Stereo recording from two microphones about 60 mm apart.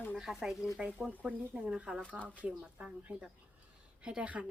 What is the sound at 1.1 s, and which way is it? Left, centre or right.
Speech, right.